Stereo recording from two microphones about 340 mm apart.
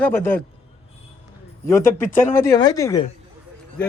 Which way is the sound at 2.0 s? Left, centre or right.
Centre.